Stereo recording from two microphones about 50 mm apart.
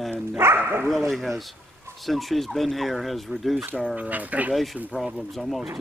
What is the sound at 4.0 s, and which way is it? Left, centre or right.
Speech, right.